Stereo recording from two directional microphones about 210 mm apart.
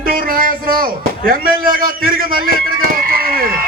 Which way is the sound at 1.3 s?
45° right (ahead or behind).